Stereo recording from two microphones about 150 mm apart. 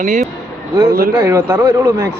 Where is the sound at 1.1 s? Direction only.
15° right (ahead or behind).